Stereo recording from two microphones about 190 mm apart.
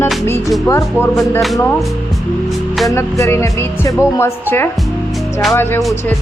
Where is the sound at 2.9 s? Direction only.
15° left (ahead or behind).